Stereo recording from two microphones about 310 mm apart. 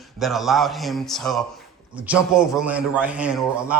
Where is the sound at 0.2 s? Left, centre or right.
Centre.